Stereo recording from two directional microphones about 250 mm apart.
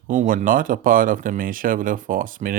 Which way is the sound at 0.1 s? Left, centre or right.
Right.